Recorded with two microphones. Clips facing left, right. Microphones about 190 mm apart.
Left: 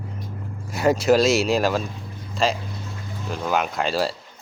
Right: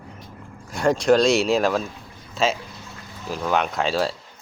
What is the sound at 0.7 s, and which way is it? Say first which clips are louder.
Speech: even; 5° left (ahead or behind).